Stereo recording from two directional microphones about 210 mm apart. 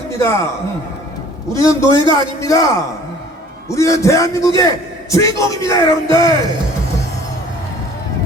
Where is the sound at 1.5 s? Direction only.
15° left (ahead or behind).